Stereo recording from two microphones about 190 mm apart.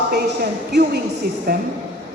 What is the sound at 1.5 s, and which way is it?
Speech, 60° right (ahead or behind).